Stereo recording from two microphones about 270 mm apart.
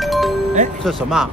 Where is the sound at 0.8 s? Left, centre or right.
Centre.